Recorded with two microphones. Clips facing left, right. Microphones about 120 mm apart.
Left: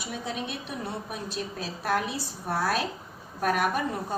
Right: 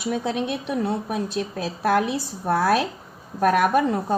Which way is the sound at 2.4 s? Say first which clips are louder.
Right 7 dB; 65° right (ahead or behind).